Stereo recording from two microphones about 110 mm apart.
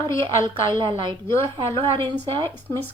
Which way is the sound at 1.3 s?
25° left (ahead or behind).